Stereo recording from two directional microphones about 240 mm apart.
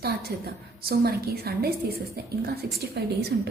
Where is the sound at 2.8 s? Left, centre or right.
Right.